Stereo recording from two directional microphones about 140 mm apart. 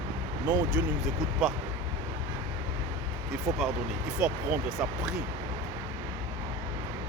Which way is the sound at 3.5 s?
20° right (ahead or behind).